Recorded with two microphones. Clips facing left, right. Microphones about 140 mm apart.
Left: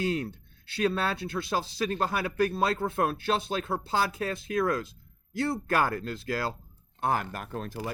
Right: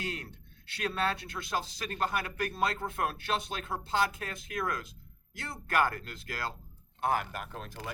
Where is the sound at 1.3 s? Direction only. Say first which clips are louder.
Left 5 dB; 30° left (ahead or behind).